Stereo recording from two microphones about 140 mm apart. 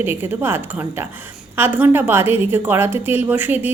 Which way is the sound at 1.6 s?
15° right (ahead or behind).